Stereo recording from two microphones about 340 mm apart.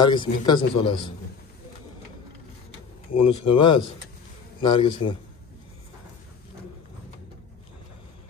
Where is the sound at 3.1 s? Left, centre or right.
Left.